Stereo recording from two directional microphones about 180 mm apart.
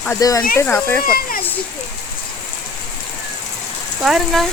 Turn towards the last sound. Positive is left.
turn(degrees=0)  # may be behind; listen again after turning